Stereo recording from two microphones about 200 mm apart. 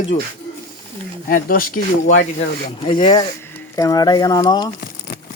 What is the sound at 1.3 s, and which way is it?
Speech, 45° left (ahead or behind).